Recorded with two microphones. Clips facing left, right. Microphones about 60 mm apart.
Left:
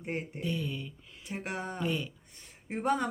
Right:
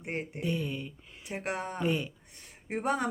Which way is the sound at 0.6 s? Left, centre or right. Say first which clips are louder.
Right 2 dB; right.